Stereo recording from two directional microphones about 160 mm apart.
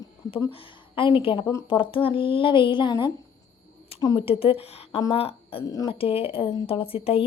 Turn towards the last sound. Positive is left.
turn(degrees=35)  # may be behind; listen again after turning